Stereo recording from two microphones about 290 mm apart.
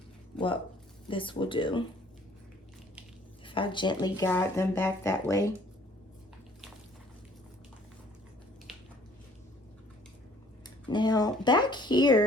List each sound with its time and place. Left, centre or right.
0.3 s speech: centre
3.4 s speech: centre
10.8 s speech: centre